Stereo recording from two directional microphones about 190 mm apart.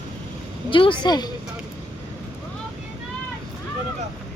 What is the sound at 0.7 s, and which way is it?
Speech, 25° left (ahead or behind).